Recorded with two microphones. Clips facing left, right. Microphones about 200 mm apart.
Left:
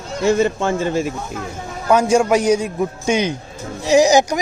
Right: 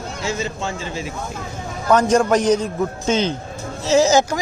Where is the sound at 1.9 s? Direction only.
10° left (ahead or behind).